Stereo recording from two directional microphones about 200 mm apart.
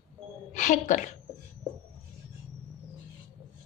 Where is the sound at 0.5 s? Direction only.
40° left (ahead or behind).